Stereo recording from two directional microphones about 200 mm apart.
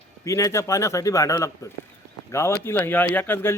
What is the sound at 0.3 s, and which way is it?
A man's voice, 15° left (ahead or behind).